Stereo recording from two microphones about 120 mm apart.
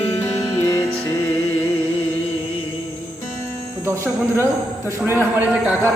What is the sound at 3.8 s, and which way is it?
Speech, 20° right (ahead or behind).